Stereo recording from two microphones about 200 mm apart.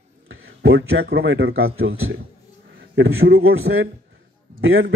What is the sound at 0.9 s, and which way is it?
A man's voice, 85° right.